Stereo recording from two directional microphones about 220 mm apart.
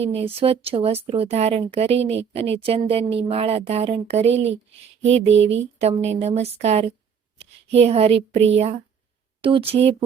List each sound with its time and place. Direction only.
0.0 s speech: 25° right (ahead or behind)
5.3 s a sound: 55° right (ahead or behind)
5.8 s speech: 30° right (ahead or behind)